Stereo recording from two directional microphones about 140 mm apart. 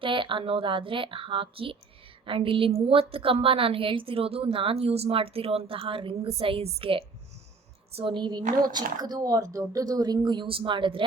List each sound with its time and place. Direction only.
0.0 s a woman's voice: 35° right (ahead or behind)